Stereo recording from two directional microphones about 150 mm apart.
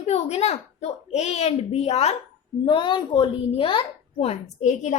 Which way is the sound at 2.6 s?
30° left (ahead or behind).